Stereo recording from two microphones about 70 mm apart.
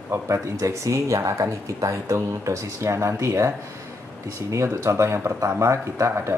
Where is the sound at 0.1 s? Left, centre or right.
Right.